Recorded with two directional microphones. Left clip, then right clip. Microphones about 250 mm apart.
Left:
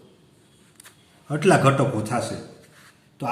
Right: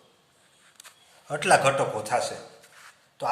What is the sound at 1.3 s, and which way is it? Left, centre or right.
A man's voice, centre.